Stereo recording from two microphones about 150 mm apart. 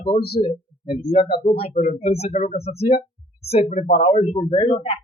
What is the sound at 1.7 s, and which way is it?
Speech, 50° left (ahead or behind).